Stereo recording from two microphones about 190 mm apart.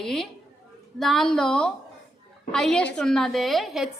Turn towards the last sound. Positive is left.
turn(degrees=0)  # may be behind; listen again after turning